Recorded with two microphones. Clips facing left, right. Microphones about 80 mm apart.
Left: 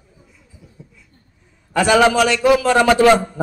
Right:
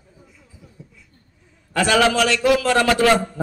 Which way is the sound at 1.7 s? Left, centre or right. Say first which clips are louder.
Left 4 dB; centre.